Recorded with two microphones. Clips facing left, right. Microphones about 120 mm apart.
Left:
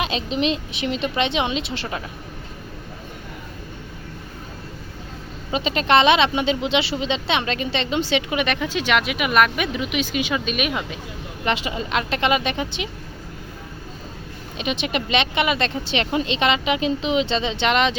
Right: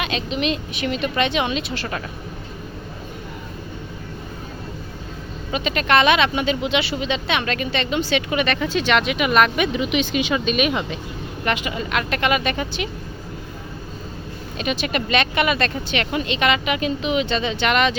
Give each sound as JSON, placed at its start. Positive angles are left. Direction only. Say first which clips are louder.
{"t": 0.3, "sound": "speech", "louder": "left 1 dB", "side_deg": 30}
{"t": 5.5, "sound": "speech", "louder": "left 1 dB", "side_deg": 30}
{"t": 11.4, "sound": "speech", "louder": "even", "side_deg": 30}
{"t": 14.6, "sound": "speech", "louder": "right 1 dB", "side_deg": 20}